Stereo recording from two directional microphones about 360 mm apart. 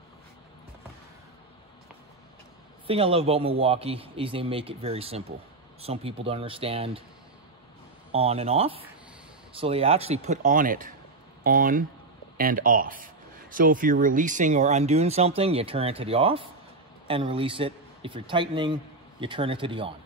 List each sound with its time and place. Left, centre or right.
2.9 s a man's voice: centre
8.1 s a man's voice: centre